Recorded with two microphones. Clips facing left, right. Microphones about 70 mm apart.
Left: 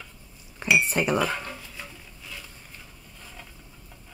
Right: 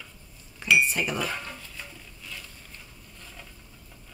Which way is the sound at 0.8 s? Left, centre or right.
Left.